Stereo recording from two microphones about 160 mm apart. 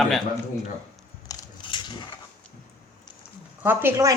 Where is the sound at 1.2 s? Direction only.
25° left (ahead or behind).